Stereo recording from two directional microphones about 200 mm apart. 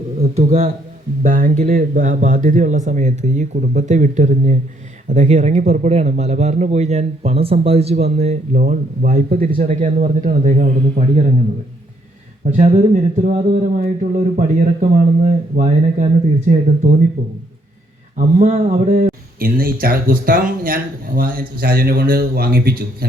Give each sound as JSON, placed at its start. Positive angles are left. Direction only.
{"t": 0.2, "sound": "a man's voice", "side_deg": -35}
{"t": 12.5, "sound": "a man's voice", "side_deg": -35}
{"t": 18.2, "sound": "speech", "side_deg": -35}